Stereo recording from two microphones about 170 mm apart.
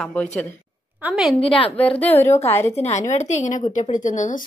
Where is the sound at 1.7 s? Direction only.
10° left (ahead or behind).